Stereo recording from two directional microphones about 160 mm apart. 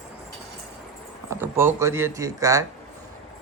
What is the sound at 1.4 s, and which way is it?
Speech, 15° right (ahead or behind).